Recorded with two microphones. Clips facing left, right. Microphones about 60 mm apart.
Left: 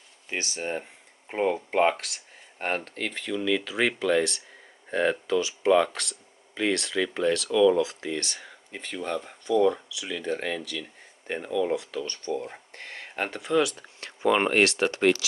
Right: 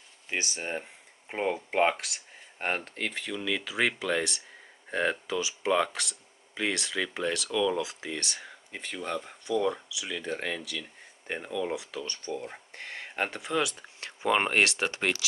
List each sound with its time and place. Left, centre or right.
0.3 s speech: centre
14.6 s speech: centre